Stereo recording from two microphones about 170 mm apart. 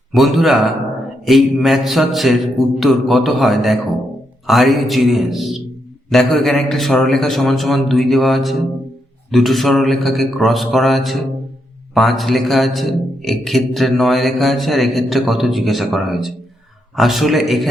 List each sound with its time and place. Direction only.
0.1 s a man's voice: centre (ahead or behind)